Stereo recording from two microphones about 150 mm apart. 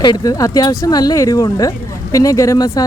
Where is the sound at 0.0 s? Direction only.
30° left (ahead or behind).